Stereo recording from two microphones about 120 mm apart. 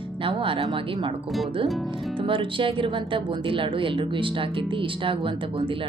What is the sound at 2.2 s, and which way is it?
Speech, 45° right (ahead or behind).